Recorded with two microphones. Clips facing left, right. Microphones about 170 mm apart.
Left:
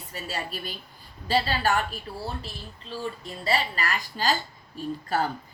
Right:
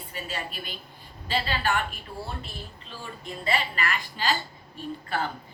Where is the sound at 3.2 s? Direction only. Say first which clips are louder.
Right 1 dB; 35° left (ahead or behind).